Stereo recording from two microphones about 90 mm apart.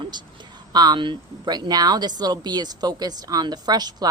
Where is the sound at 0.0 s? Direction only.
55° right (ahead or behind).